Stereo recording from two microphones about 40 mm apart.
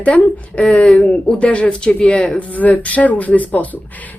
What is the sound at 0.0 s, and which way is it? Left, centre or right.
Speech, left.